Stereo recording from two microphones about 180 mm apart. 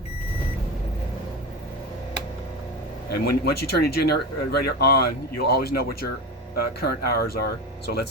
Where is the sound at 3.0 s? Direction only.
60° left (ahead or behind).